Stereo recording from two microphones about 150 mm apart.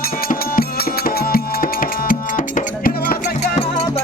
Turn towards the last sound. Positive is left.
turn(degrees=70)  # may be behind; listen again after turning